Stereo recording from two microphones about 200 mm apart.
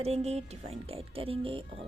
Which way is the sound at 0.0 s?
30° right (ahead or behind).